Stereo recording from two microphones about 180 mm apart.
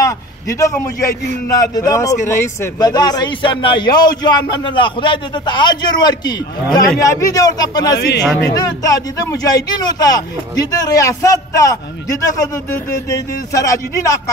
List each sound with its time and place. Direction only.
0.0 s a man's voice: 20° left (ahead or behind)